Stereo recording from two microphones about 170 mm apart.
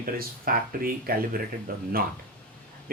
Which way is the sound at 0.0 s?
60° right (ahead or behind).